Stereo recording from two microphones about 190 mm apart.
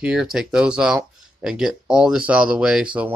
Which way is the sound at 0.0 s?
5° right (ahead or behind).